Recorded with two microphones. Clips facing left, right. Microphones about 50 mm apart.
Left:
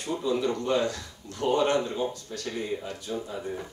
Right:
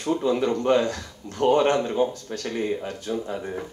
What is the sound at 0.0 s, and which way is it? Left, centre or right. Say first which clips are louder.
Speech: right 5 dB; right.